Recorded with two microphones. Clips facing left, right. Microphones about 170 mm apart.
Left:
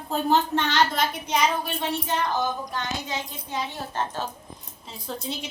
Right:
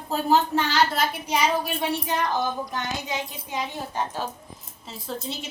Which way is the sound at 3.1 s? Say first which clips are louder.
Right 1 dB; 15° right (ahead or behind).